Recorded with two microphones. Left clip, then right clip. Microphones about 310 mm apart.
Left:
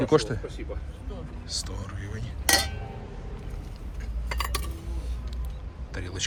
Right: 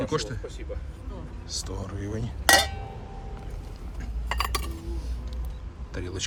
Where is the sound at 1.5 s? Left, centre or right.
Centre.